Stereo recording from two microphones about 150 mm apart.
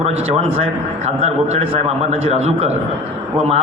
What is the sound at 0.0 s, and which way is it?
A man's voice, 45° right (ahead or behind).